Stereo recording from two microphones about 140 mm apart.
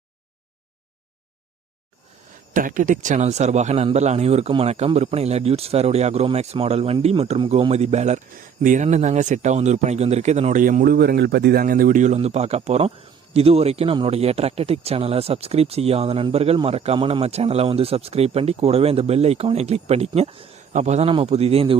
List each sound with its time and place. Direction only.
2.5 s speech: 75° right (ahead or behind); by 10.6 s 50° right (ahead or behind)
10.6 s speech: 80° right; by 20.5 s 40° right (ahead or behind)
20.7 s speech: 55° right (ahead or behind)